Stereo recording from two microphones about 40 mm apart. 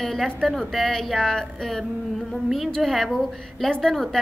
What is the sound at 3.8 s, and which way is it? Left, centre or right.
Speech, centre.